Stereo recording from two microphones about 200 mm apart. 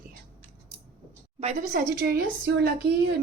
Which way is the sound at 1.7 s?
45° right (ahead or behind).